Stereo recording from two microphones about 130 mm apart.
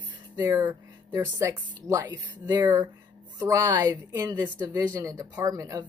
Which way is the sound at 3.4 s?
20° right (ahead or behind).